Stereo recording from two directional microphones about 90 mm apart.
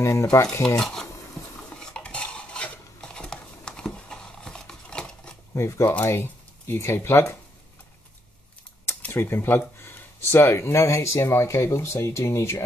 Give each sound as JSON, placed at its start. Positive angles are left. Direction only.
{"t": 0.0, "sound": "stir", "side_deg": 35}
{"t": 0.7, "sound": "speech", "side_deg": 5}
{"t": 2.0, "sound": "cutlery", "side_deg": 10}
{"t": 5.5, "sound": "speech", "side_deg": 35}
{"t": 8.8, "sound": "speech", "side_deg": 25}